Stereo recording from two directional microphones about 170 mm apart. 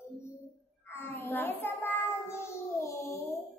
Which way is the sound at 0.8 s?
15° left (ahead or behind).